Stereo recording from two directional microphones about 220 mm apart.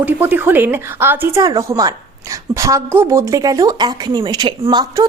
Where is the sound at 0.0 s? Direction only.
10° right (ahead or behind).